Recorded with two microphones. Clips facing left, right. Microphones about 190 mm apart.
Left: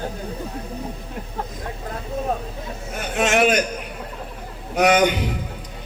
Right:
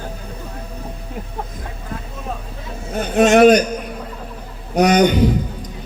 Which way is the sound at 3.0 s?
40° right (ahead or behind).